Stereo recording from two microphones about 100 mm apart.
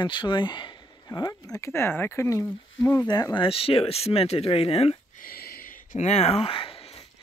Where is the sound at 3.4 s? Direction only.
70° left (ahead or behind).